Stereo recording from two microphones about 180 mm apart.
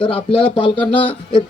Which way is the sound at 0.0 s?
30° left (ahead or behind).